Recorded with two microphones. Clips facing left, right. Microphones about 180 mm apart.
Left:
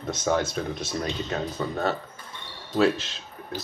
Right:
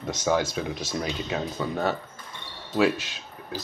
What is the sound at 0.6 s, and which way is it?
Speech, 10° right (ahead or behind).